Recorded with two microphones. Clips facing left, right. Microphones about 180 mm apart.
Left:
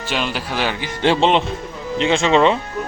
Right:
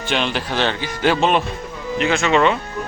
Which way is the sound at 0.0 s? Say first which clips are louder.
Right 2 dB; 5° left (ahead or behind).